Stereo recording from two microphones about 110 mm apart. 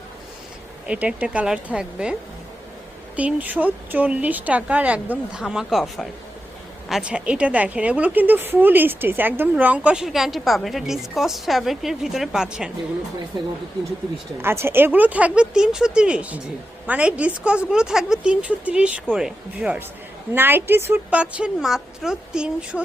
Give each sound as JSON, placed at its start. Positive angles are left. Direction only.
{"t": 0.9, "sound": "a woman's voice", "side_deg": -10}
{"t": 3.2, "sound": "a woman's voice", "side_deg": -15}
{"t": 14.4, "sound": "a woman's voice", "side_deg": -20}
{"t": 20.3, "sound": "a woman's voice", "side_deg": -20}
{"t": 21.2, "sound": "a woman's voice", "side_deg": -10}